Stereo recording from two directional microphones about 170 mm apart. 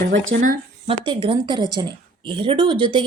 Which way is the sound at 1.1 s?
30° right (ahead or behind).